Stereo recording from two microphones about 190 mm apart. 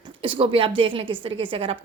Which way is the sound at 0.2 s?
30° right (ahead or behind).